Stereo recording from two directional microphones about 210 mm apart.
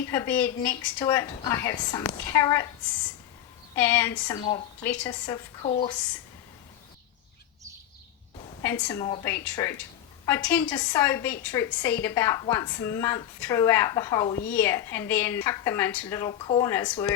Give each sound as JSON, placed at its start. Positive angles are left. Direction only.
{"t": 0.0, "sound": "a woman's voice", "side_deg": 10}
{"t": 3.8, "sound": "a woman's voice", "side_deg": 10}
{"t": 4.9, "sound": "a woman's voice", "side_deg": 5}
{"t": 8.6, "sound": "a woman's voice", "side_deg": 15}